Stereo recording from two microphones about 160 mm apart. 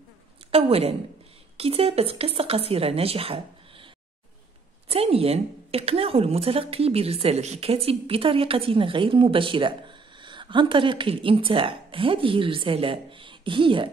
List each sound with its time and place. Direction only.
0.5 s a woman's voice: 35° right (ahead or behind)
4.8 s a woman's voice: 40° right (ahead or behind)